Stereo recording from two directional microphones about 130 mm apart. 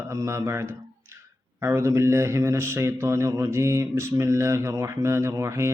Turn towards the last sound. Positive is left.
turn(degrees=-25)  # may be behind; listen again after turning